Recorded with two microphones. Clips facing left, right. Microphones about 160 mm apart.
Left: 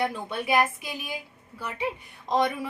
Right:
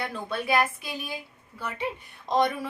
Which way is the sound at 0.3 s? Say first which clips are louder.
Right 2 dB; 15° left (ahead or behind).